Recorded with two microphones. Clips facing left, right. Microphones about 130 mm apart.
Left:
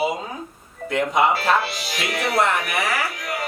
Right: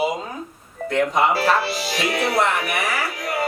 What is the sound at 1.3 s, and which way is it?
Speech, 35° right (ahead or behind).